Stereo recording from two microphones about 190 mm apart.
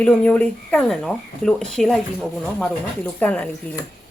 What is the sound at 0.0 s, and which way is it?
Speech, 5° left (ahead or behind).